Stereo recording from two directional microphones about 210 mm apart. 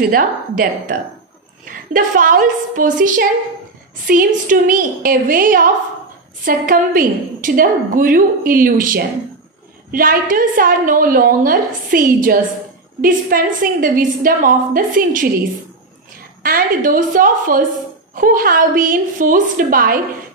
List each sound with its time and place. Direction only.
0.0 s a woman's voice: 45° right (ahead or behind)
16.4 s a woman's voice: 40° right (ahead or behind)